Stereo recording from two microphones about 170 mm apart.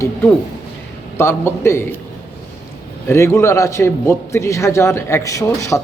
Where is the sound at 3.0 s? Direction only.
15° left (ahead or behind).